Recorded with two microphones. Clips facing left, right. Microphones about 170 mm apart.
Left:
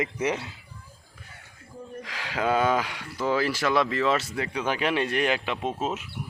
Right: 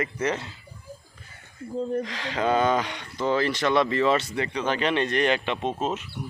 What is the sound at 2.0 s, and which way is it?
Speech, 5° left (ahead or behind).